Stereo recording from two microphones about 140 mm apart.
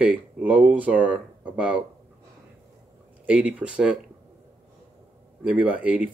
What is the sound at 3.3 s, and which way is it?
Speech, 10° right (ahead or behind).